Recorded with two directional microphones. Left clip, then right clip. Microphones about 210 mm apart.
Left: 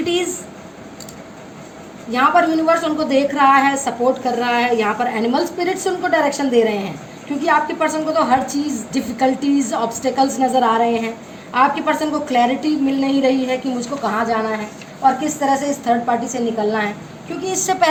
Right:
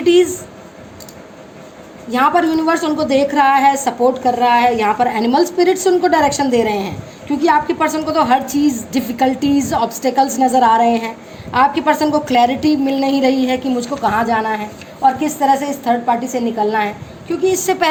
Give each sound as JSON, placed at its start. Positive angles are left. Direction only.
{"t": 0.0, "sound": "speech", "side_deg": -35}
{"t": 2.1, "sound": "a woman's voice", "side_deg": -45}